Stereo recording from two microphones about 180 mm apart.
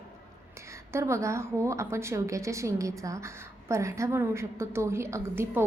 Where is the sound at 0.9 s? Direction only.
15° right (ahead or behind).